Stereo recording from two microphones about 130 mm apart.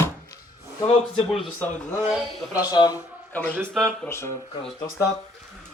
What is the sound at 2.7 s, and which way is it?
Speech, 30° left (ahead or behind).